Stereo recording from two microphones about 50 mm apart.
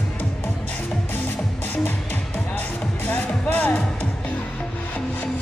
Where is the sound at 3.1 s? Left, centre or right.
Left.